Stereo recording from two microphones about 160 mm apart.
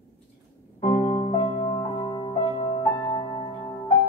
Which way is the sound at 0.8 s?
45° left (ahead or behind).